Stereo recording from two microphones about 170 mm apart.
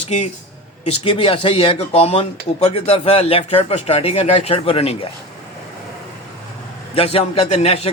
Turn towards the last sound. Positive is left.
turn(degrees=40)  # may be behind; listen again after turning